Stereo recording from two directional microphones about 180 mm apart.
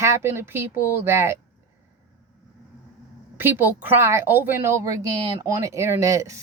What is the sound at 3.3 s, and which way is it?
A woman's voice, 10° right (ahead or behind).